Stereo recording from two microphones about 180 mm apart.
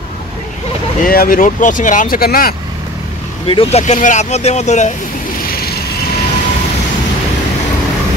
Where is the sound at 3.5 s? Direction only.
35° left (ahead or behind).